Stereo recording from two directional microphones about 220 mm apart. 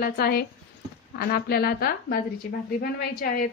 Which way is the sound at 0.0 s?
45° left (ahead or behind).